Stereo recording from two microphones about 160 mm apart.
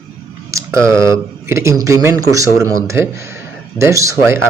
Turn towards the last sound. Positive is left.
turn(degrees=-20)  # may be behind; listen again after turning